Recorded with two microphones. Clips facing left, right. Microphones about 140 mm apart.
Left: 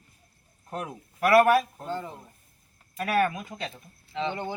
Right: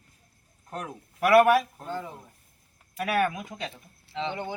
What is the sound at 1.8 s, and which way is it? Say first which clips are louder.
Speech: left 1 dB; centre (ahead or behind).